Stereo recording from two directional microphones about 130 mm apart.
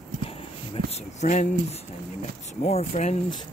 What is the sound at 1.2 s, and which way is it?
Speech, 65° left (ahead or behind).